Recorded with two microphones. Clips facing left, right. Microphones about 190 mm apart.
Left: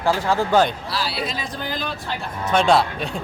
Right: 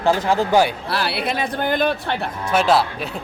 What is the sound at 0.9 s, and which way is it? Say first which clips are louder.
Speech: right 4 dB; 60° right (ahead or behind).